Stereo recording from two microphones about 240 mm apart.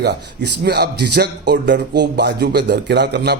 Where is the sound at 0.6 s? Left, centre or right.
Right.